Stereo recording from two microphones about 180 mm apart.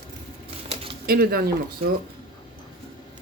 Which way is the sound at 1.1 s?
55° right (ahead or behind).